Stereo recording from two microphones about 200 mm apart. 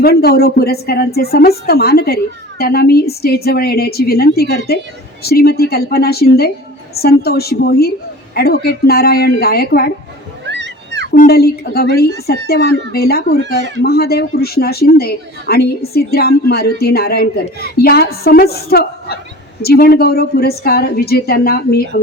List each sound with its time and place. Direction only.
0.0 s speech: 50° left (ahead or behind)
10.4 s a sound: 60° right (ahead or behind)
11.1 s speech: 50° left (ahead or behind)